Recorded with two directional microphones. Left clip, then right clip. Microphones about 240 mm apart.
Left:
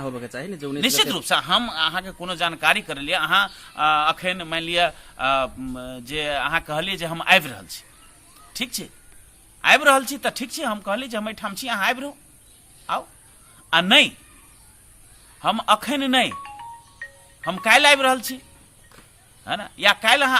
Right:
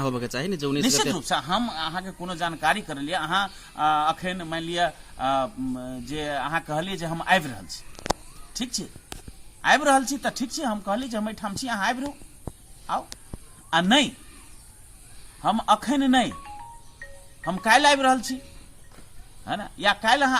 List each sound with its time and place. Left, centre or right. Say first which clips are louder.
0.0 s speech: right 3 dB; right
0.9 s a man's voice: left 6 dB; centre
13.7 s a man's voice: left 5 dB; centre
15.4 s a man's voice: left 2 dB; centre
17.7 s a man's voice: left 3 dB; centre
19.5 s a man's voice: left 4 dB; centre